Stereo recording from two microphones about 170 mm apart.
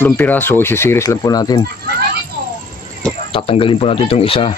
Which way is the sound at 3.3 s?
30° left (ahead or behind).